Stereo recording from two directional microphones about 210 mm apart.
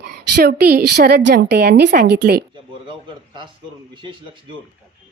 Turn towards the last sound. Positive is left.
turn(degrees=-25)  # may be behind; listen again after turning